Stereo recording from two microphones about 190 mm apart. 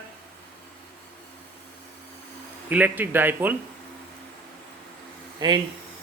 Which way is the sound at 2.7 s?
10° right (ahead or behind).